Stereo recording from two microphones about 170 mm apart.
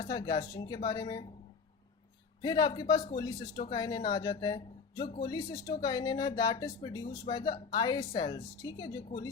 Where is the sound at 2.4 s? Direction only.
25° left (ahead or behind).